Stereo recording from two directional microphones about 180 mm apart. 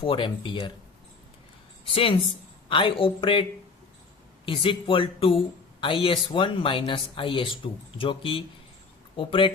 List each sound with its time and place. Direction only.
0.0 s speech: 25° left (ahead or behind)
1.9 s a woman's voice: 30° left (ahead or behind)
4.4 s speech: 30° left (ahead or behind)